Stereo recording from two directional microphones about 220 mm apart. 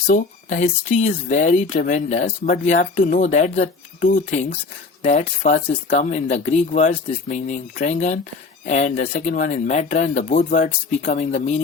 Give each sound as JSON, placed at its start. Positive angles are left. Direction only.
{"t": 0.1, "sound": "speech", "side_deg": 35}